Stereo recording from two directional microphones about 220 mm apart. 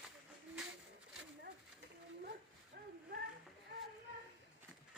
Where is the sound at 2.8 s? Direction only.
50° right (ahead or behind).